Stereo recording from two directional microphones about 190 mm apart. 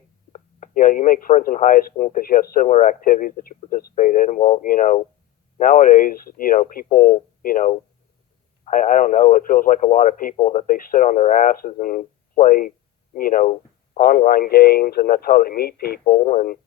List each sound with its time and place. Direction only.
0.3 s speech: 45° left (ahead or behind)